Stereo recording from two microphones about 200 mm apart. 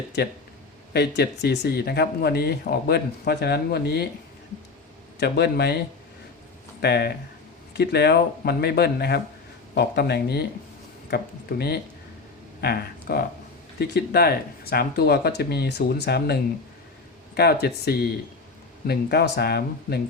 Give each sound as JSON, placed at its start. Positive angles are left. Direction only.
{"t": 0.2, "sound": "speech", "side_deg": 55}
{"t": 5.2, "sound": "speech", "side_deg": 55}
{"t": 6.8, "sound": "speech", "side_deg": 55}